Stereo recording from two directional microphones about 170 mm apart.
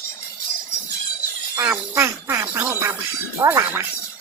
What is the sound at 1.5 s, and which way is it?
Speech, 15° right (ahead or behind).